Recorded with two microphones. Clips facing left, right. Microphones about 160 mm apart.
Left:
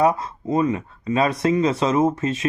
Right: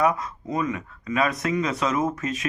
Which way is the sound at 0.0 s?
30° left (ahead or behind).